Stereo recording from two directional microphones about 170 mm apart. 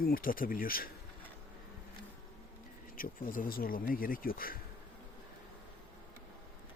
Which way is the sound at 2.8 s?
55° left (ahead or behind).